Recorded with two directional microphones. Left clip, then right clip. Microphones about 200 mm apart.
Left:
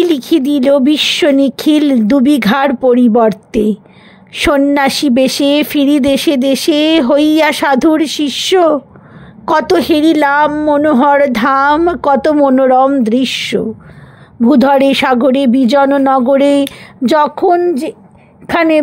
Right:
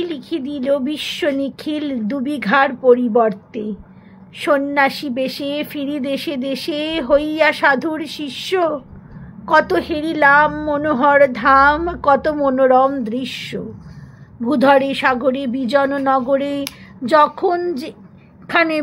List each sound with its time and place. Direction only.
0.0 s a woman's voice: 55° left (ahead or behind)